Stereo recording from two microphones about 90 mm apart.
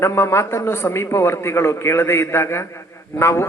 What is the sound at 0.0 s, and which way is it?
A man's voice, 30° left (ahead or behind).